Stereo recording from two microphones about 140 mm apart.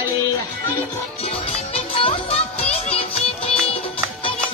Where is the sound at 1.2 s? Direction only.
45° left (ahead or behind).